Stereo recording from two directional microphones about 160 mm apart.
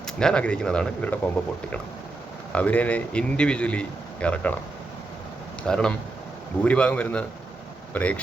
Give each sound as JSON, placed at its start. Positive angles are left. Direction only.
{"t": 0.2, "sound": "speech", "side_deg": 5}
{"t": 2.5, "sound": "a man's voice", "side_deg": 10}
{"t": 5.6, "sound": "a man's voice", "side_deg": 5}